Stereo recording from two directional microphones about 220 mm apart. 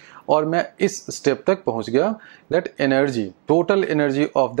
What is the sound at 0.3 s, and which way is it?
Speech, 20° right (ahead or behind).